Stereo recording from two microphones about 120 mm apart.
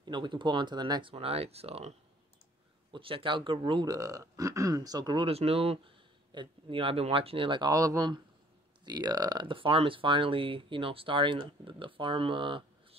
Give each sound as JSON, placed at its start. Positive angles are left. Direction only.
{"t": 0.0, "sound": "speech", "side_deg": -40}
{"t": 1.1, "sound": "speech", "side_deg": -55}
{"t": 3.8, "sound": "speech", "side_deg": -30}
{"t": 5.2, "sound": "speech", "side_deg": -55}
{"t": 7.7, "sound": "speech", "side_deg": -30}